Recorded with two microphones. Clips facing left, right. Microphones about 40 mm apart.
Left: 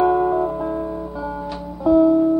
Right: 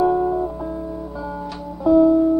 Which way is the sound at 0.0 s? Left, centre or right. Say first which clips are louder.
Left 2 dB; left.